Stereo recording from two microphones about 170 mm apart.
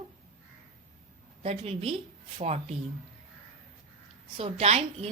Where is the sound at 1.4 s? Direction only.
35° right (ahead or behind).